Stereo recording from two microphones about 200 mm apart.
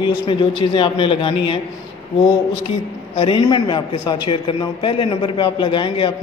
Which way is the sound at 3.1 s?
25° left (ahead or behind).